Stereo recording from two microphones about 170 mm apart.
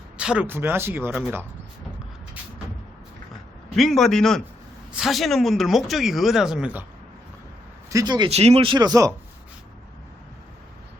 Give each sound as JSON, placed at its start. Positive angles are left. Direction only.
{"t": 0.2, "sound": "speech", "side_deg": -5}
{"t": 3.8, "sound": "speech", "side_deg": 0}
{"t": 7.9, "sound": "speech", "side_deg": -20}
{"t": 8.3, "sound": "speech", "side_deg": -40}